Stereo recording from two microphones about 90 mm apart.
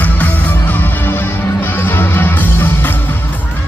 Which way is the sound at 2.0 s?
25° left (ahead or behind).